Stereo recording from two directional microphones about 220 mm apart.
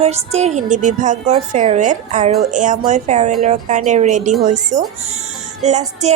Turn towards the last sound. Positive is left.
turn(degrees=-30)  # may be behind; listen again after turning